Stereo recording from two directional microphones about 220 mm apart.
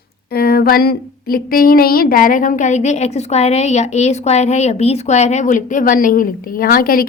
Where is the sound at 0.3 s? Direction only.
45° left (ahead or behind).